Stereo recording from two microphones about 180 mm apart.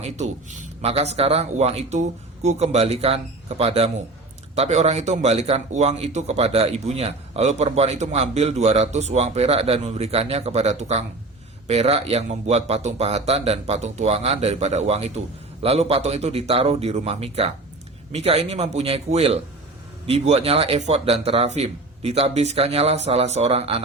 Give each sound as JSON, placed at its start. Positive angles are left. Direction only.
{"t": 0.0, "sound": "a man's voice", "side_deg": -40}